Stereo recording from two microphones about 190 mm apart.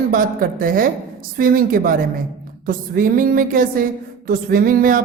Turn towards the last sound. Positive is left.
turn(degrees=-45)  # may be behind; listen again after turning